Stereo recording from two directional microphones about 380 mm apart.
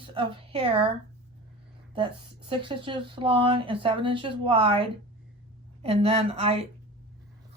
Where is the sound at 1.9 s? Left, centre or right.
Centre.